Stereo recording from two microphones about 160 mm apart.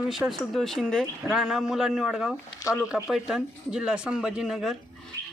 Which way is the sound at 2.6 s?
20° left (ahead or behind).